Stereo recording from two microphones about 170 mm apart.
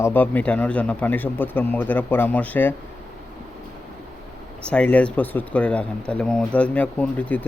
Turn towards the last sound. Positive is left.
turn(degrees=10)  # may be behind; listen again after turning